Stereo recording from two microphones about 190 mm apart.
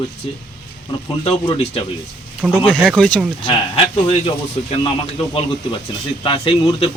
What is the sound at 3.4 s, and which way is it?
Speech, 30° left (ahead or behind).